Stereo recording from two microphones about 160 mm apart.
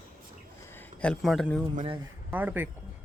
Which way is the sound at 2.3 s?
10° right (ahead or behind).